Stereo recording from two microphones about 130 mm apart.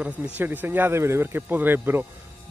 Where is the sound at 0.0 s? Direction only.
15° right (ahead or behind).